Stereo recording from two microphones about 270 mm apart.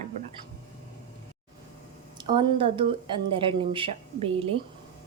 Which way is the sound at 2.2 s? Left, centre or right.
Centre.